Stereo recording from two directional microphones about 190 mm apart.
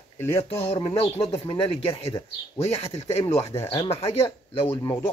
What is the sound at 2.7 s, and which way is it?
Speech, 35° left (ahead or behind).